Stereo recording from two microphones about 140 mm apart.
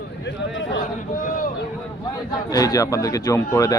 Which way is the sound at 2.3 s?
25° left (ahead or behind).